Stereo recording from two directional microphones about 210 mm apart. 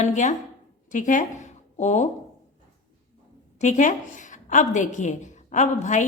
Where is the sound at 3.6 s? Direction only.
35° left (ahead or behind).